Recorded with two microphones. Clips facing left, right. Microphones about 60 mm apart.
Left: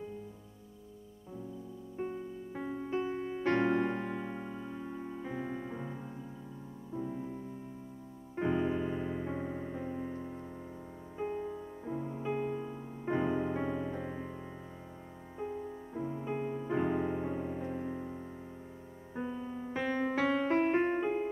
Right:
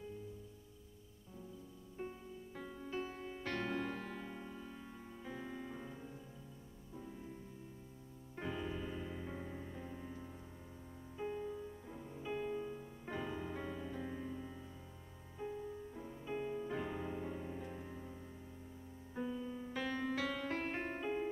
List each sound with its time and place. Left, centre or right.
2.0 s music: left
8.4 s music: left